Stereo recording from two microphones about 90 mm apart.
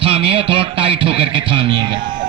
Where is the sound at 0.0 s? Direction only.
90° right.